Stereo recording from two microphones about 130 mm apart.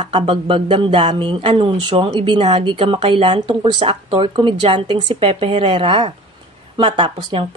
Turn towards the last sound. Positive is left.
turn(degrees=-45)  # may be behind; listen again after turning